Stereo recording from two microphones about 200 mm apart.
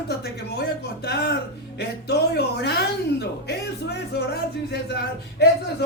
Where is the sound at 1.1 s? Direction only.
55° left (ahead or behind).